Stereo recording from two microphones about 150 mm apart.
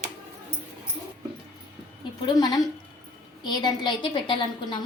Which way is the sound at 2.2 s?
25° left (ahead or behind).